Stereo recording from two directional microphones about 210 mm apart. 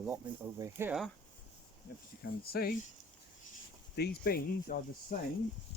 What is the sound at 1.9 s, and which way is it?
Speech, 45° left (ahead or behind).